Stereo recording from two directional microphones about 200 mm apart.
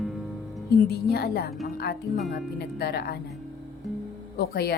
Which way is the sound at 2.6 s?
55° left (ahead or behind).